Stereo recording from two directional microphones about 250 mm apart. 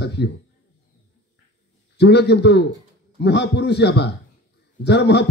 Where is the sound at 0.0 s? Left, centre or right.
Left.